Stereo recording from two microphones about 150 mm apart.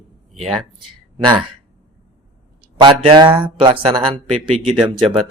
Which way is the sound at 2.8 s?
30° right (ahead or behind).